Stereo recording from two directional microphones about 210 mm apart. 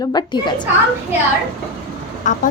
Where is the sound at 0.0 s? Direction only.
20° left (ahead or behind).